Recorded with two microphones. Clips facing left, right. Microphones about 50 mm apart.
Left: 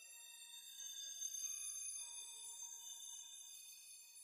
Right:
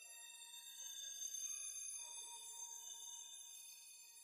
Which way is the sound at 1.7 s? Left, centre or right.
Right.